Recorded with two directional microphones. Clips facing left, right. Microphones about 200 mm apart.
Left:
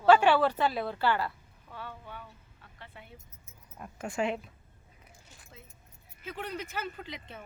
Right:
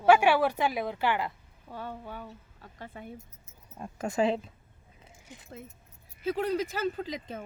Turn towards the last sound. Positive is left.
turn(degrees=-40)  # may be behind; listen again after turning